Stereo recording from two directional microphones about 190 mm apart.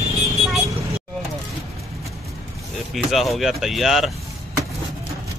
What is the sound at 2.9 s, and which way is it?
A man's voice, centre (ahead or behind).